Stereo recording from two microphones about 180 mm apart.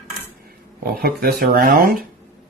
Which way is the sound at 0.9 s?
55° right (ahead or behind).